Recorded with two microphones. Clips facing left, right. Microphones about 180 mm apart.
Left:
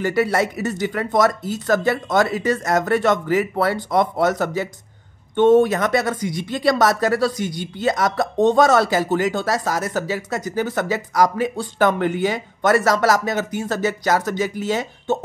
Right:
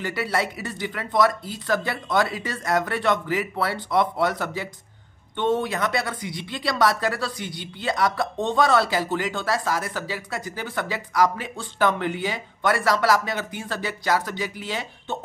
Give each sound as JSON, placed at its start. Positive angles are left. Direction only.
{"t": 0.0, "sound": "speech", "side_deg": 45}